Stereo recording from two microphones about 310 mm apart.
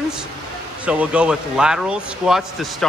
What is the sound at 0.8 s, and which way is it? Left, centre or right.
Speech, centre.